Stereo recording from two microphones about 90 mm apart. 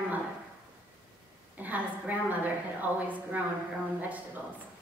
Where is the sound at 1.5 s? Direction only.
20° right (ahead or behind).